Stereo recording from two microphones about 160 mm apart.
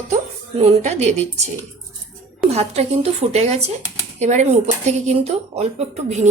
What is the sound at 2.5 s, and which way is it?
Speech, 40° right (ahead or behind).